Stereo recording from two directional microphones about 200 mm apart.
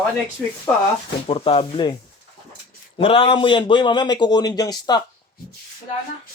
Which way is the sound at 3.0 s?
25° left (ahead or behind).